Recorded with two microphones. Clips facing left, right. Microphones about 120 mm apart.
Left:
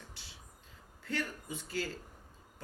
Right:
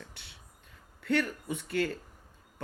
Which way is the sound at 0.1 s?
60° right (ahead or behind).